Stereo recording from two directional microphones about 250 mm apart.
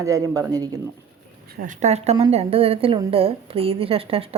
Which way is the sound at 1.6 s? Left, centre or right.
Right.